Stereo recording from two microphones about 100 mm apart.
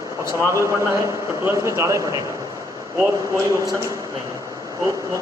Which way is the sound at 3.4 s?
30° right (ahead or behind).